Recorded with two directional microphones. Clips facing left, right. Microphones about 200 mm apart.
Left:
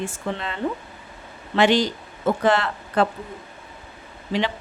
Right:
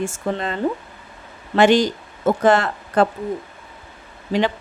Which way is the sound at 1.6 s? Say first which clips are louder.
Right 4 dB; 45° right (ahead or behind).